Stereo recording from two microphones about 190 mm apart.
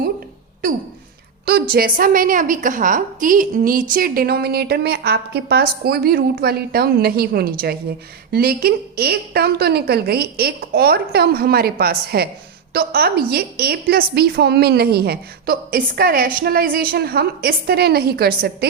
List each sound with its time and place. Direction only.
1.7 s a woman's voice: 50° right (ahead or behind)